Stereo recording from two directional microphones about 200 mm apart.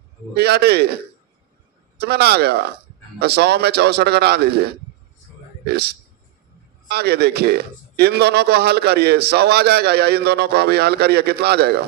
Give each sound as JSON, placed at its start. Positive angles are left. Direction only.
{"t": 0.3, "sound": "a man's voice", "side_deg": -55}